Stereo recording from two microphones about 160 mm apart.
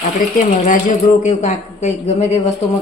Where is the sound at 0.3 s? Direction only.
55° left (ahead or behind).